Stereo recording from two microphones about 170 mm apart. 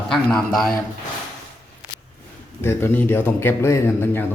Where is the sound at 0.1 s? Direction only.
Centre (ahead or behind).